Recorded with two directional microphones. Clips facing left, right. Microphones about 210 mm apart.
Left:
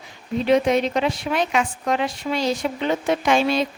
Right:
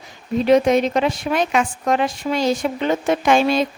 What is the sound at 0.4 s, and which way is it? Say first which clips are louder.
A woman's voice: right 3 dB; 45° right (ahead or behind).